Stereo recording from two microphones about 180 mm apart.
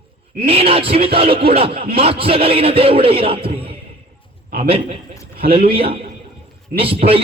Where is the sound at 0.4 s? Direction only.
30° right (ahead or behind).